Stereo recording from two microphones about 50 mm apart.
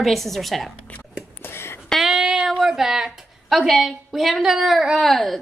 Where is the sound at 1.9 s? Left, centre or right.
Centre.